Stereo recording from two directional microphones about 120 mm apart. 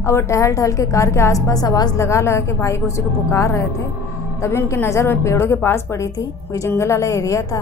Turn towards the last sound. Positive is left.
turn(degrees=25)  # may be behind; listen again after turning